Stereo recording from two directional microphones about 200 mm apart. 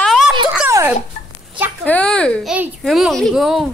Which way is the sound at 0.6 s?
10° right (ahead or behind).